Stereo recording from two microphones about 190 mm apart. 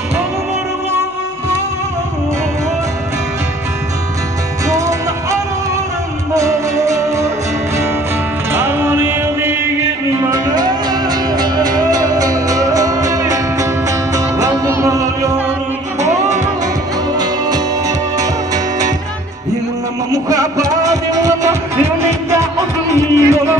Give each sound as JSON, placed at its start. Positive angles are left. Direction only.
{"t": 4.6, "sound": "music", "side_deg": -15}
{"t": 8.5, "sound": "music", "side_deg": -10}
{"t": 16.0, "sound": "music", "side_deg": -40}
{"t": 17.2, "sound": "music", "side_deg": -20}
{"t": 20.1, "sound": "music", "side_deg": -20}